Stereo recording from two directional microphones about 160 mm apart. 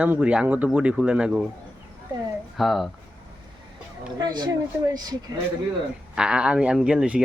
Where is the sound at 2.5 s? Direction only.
Centre (ahead or behind).